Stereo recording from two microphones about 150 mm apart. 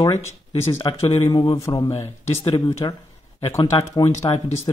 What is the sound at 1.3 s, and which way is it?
Speech, 30° left (ahead or behind).